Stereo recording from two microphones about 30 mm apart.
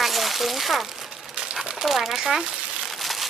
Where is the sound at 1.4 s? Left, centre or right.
Right.